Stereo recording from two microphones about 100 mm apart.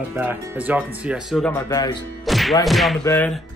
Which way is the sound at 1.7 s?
40° left (ahead or behind).